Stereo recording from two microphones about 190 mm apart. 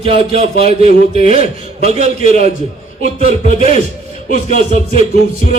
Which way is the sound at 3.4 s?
40° left (ahead or behind).